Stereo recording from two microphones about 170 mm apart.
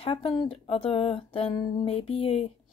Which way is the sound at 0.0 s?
30° left (ahead or behind).